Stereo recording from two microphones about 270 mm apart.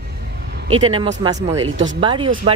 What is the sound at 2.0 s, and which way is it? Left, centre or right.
Speech, centre.